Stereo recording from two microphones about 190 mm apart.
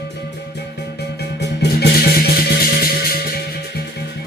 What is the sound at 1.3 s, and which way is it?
Music, 60° left (ahead or behind).